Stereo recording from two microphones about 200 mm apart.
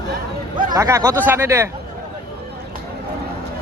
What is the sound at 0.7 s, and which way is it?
Speech, 15° right (ahead or behind).